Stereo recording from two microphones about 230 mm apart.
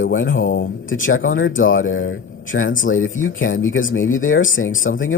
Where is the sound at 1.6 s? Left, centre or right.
Left.